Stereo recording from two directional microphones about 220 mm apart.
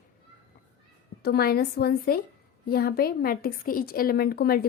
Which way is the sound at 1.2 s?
45° left (ahead or behind).